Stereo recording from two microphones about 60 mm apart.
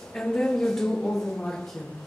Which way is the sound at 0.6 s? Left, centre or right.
Centre.